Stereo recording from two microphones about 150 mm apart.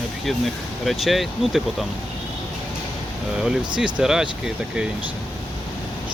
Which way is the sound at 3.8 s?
5° right (ahead or behind).